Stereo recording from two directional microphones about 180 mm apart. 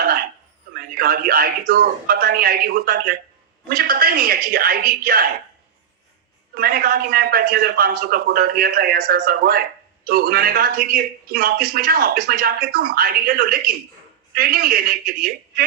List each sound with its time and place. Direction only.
0.9 s speech: 55° right (ahead or behind)
6.5 s speech: 55° right (ahead or behind)